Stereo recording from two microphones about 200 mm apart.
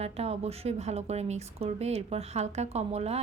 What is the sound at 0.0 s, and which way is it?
A woman's voice, 30° right (ahead or behind).